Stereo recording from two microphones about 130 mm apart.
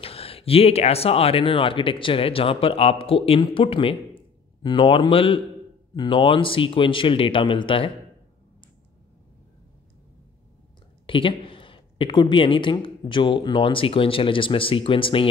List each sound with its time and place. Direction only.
0.0 s speech: 45° left (ahead or behind)
11.1 s speech: 40° left (ahead or behind)